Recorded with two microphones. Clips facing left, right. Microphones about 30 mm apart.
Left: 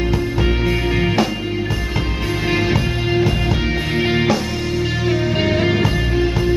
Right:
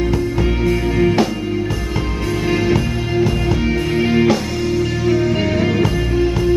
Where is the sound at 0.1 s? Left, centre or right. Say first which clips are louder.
Right 1 dB; centre.